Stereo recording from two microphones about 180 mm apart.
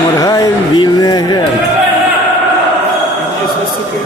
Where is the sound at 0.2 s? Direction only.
20° left (ahead or behind).